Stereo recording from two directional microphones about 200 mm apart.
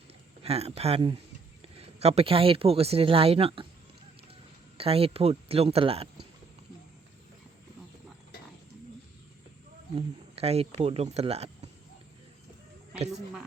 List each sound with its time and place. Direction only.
0.4 s speech: 30° right (ahead or behind)
4.8 s speech: 30° right (ahead or behind)
10.3 s speech: 30° right (ahead or behind)